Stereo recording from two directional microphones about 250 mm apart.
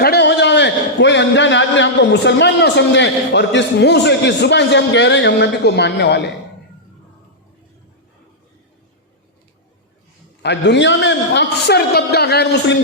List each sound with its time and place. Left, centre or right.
0.0 s a man's voice: left
10.4 s a man's voice: left